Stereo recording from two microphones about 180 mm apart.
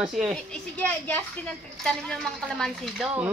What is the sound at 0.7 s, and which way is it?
Speech, 10° left (ahead or behind).